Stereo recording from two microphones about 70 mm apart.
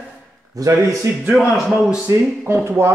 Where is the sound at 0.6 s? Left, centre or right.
Right.